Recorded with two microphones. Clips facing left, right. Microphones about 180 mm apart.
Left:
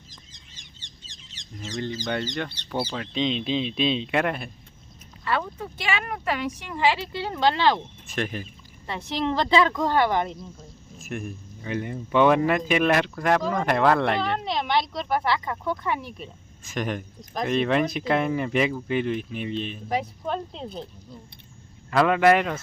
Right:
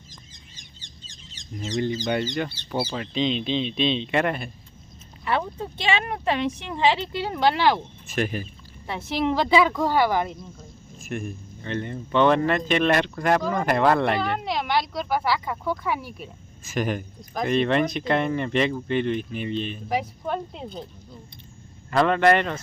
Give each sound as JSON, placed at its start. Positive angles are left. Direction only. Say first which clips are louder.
{"t": 1.6, "sound": "speech", "louder": "right 4 dB", "side_deg": -15}
{"t": 5.2, "sound": "speech", "louder": "right 2 dB", "side_deg": -20}
{"t": 21.8, "sound": "speech", "louder": "even", "side_deg": 5}